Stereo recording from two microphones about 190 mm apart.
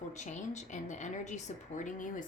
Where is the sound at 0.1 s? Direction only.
40° left (ahead or behind).